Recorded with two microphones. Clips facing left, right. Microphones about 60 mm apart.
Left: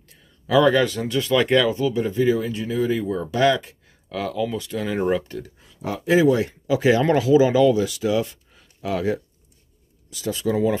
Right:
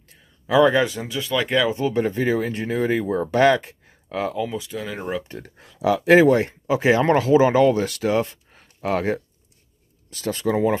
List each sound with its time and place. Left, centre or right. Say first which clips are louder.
0.5 s speech: even; right; by 1.7 s centre
1.7 s speech: right 1 dB; right
4.5 s speech: left 3 dB; centre
5.6 s speech: right 11 dB; right
6.4 s speech: even; right